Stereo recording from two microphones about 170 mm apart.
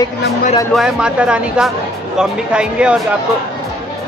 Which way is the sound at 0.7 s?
5° right (ahead or behind).